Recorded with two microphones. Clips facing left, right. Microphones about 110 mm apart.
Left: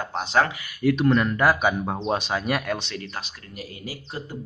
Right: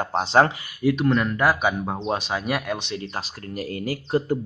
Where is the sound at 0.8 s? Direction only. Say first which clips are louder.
Left 1 dB; centre (ahead or behind).